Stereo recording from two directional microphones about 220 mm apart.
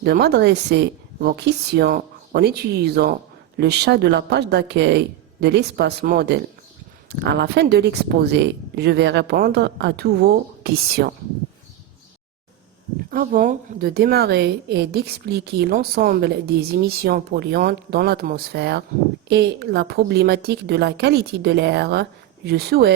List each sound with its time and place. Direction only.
0.0 s a woman's voice: 45° right (ahead or behind)
13.1 s a woman's voice: 40° right (ahead or behind)